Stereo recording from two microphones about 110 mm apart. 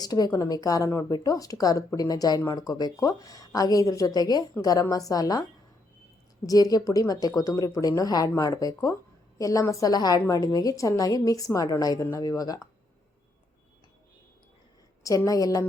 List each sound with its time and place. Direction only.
0.0 s a woman's voice: 35° left (ahead or behind)
15.0 s a woman's voice: 30° left (ahead or behind)